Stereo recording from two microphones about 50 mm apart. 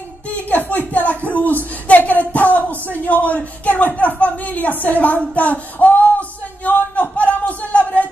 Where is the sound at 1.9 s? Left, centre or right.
Left.